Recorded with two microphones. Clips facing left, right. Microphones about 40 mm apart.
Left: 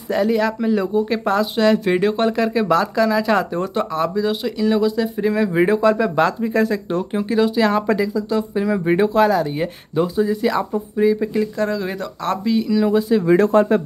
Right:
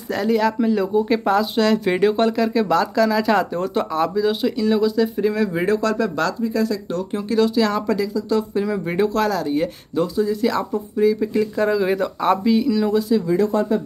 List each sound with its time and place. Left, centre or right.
0.1 s speech: centre; by 6.3 s left
6.4 s speech: left
7.2 s speech: centre
11.5 s speech: centre
13.3 s speech: left